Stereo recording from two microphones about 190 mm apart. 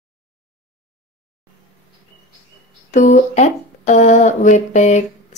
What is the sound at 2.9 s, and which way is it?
Speech, 40° left (ahead or behind).